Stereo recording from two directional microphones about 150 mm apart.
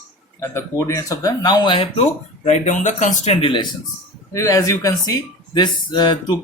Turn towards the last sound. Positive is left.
turn(degrees=30)  # may be behind; listen again after turning